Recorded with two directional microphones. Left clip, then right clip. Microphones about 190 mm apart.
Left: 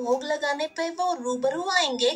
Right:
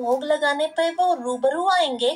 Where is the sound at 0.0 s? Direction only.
35° left (ahead or behind).